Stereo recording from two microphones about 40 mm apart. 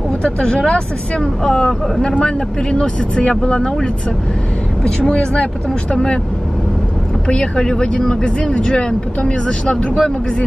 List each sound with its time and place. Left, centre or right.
0.2 s speech: left
7.2 s speech: left